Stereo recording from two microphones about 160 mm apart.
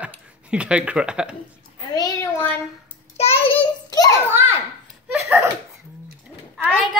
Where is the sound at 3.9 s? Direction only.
25° left (ahead or behind).